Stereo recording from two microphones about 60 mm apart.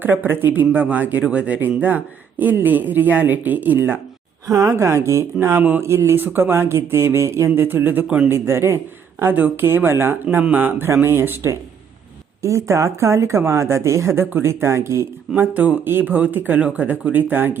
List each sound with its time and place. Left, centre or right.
0.0 s speech: right
4.4 s speech: right
6.1 s speech: right
7.5 s speech: right
8.0 s a man's voice: centre
8.3 s speech: right
9.3 s speech: right
9.6 s speech: right
10.9 s speech: right
12.4 s speech: right
15.4 s speech: right